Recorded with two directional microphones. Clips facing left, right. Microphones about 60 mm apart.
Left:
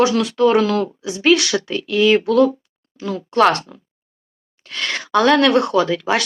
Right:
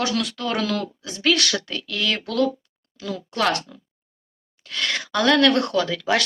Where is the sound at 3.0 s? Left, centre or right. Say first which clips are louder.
Left 9 dB; left.